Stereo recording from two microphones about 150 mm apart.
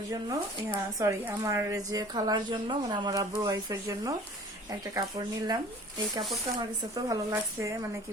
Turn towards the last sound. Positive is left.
turn(degrees=-20)  # may be behind; listen again after turning